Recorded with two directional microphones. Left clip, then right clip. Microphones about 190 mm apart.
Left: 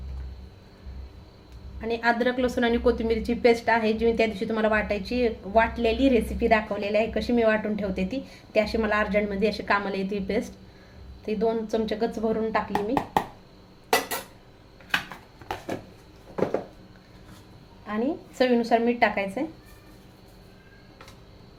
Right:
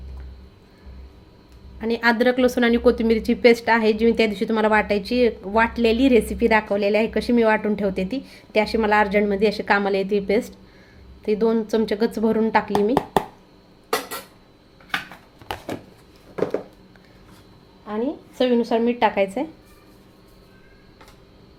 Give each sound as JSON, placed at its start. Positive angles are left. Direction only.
{"t": 1.8, "sound": "a woman's voice", "side_deg": -45}
{"t": 15.5, "sound": "a sound", "side_deg": -25}
{"t": 17.8, "sound": "speech", "side_deg": -20}